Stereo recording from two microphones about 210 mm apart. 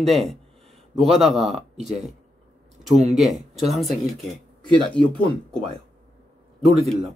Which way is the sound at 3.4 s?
30° right (ahead or behind).